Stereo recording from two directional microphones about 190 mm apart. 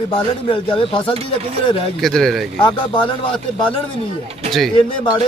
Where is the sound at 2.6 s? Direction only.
25° left (ahead or behind).